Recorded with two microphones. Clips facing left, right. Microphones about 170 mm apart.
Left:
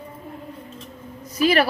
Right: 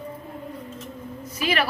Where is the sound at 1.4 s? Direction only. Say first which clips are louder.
Left 7 dB; 40° left (ahead or behind).